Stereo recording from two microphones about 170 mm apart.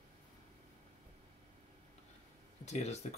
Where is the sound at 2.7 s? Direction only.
40° left (ahead or behind).